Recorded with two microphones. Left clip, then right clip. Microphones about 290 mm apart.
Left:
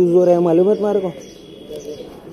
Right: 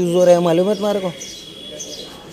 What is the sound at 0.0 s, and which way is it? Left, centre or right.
A man's voice, right.